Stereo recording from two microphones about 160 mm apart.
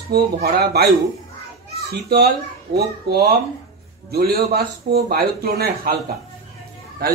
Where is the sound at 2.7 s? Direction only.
80° right.